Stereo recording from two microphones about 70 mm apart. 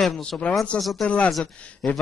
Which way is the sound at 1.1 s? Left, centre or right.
Centre.